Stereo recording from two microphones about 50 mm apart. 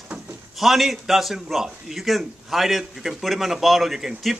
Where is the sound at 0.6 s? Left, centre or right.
Centre.